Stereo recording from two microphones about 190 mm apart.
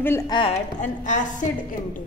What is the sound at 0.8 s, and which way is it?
Speech, 40° left (ahead or behind).